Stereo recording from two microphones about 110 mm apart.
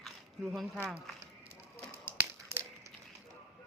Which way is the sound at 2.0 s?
15° right (ahead or behind).